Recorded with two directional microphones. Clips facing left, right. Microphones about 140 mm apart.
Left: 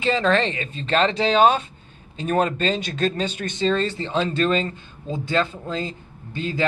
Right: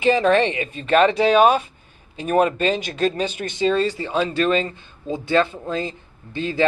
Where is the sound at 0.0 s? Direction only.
15° right (ahead or behind).